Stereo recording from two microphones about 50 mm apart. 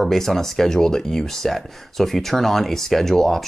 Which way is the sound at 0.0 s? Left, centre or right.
Centre.